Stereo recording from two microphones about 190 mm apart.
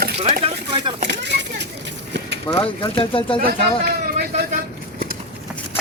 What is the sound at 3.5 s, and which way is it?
Speech, 55° right (ahead or behind).